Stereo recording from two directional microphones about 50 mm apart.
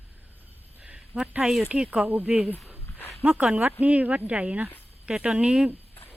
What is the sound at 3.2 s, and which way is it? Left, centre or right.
Speech, right.